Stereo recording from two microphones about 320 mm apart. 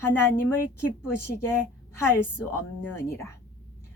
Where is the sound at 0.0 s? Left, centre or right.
Centre.